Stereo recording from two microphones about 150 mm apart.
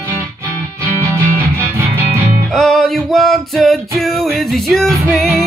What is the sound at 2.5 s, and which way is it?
Music, centre (ahead or behind).